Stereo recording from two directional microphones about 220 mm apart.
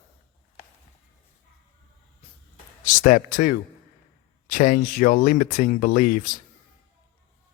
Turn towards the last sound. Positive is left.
turn(degrees=35)  # may be behind; listen again after turning